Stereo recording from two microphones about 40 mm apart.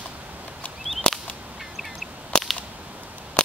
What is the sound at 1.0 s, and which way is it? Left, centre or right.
Whip, left.